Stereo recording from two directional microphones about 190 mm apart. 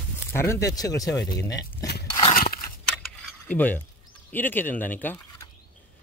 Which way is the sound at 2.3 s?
50° left (ahead or behind).